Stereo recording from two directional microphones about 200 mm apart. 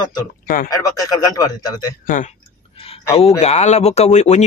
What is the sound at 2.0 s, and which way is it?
Speech, 40° left (ahead or behind).